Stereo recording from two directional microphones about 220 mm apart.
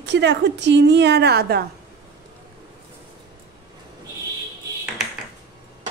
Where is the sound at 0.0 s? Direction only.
55° right (ahead or behind).